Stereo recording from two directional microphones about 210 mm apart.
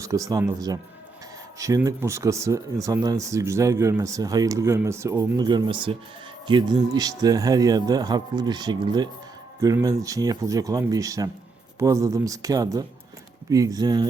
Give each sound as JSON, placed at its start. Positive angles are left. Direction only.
{"t": 0.0, "sound": "speech", "side_deg": -15}